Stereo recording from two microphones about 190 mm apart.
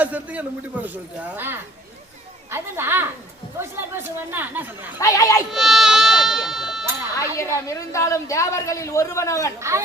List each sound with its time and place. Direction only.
0.0 s speech: 10° right (ahead or behind)
4.9 s a woman's voice: 15° left (ahead or behind)
5.5 s speech: centre (ahead or behind)
7.2 s a woman's voice: 15° left (ahead or behind)
9.6 s speech: 15° right (ahead or behind)